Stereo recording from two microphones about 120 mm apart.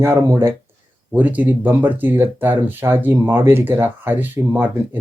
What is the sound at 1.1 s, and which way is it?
Speech, 15° right (ahead or behind).